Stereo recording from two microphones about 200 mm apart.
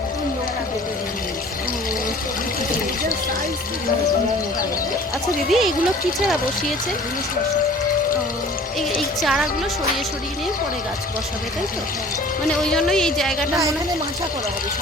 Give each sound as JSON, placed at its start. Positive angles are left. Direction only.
{"t": 5.5, "sound": "a woman's voice", "side_deg": 0}
{"t": 9.2, "sound": "a woman's voice", "side_deg": 0}
{"t": 12.7, "sound": "a woman's voice", "side_deg": 5}